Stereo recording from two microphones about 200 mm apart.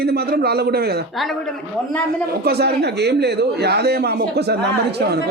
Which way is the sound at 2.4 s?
55° right (ahead or behind).